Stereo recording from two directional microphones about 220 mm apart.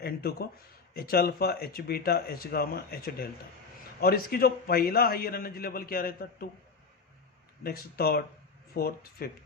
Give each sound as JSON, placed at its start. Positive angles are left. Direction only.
{"t": 0.0, "sound": "a sound", "side_deg": 45}
{"t": 0.9, "sound": "a man's voice", "side_deg": 45}
{"t": 7.6, "sound": "a man's voice", "side_deg": 45}